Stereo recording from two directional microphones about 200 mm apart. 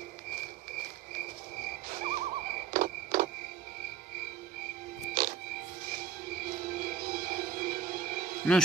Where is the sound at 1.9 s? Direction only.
40° right (ahead or behind).